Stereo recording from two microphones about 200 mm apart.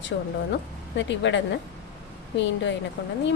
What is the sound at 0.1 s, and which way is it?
A woman's voice, 65° left (ahead or behind).